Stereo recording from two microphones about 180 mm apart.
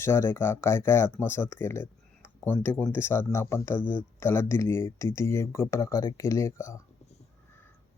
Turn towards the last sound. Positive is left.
turn(degrees=15)  # may be behind; listen again after turning